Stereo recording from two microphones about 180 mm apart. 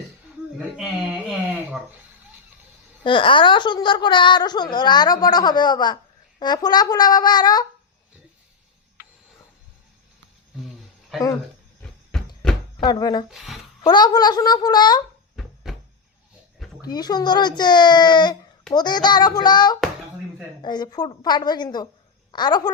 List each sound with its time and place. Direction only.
0.8 s a sound: 5° right (ahead or behind)
3.0 s a woman's voice: 30° left (ahead or behind)
11.1 s speech: centre (ahead or behind)
12.4 s a sound: 5° left (ahead or behind)
12.8 s a woman's voice: 25° left (ahead or behind)
13.2 s speech: centre (ahead or behind)
13.8 s a woman's voice: 20° left (ahead or behind)
16.8 s a woman's voice: 20° left (ahead or behind)